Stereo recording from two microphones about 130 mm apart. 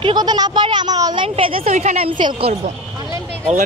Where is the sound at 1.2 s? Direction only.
45° right (ahead or behind).